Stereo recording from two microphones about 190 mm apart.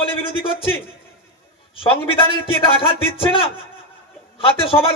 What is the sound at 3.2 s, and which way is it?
A man's voice, 30° left (ahead or behind).